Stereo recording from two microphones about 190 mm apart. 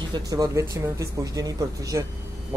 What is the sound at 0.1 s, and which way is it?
Speech, 20° right (ahead or behind).